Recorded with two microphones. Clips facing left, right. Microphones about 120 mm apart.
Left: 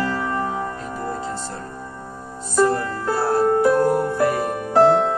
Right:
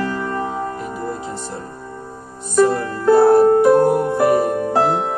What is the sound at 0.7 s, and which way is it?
Music, 15° right (ahead or behind).